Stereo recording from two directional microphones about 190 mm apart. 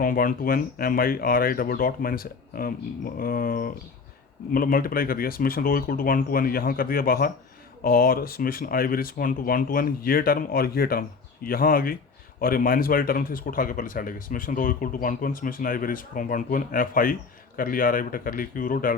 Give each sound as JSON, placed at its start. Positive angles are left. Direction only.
{"t": 0.0, "sound": "speech", "side_deg": 45}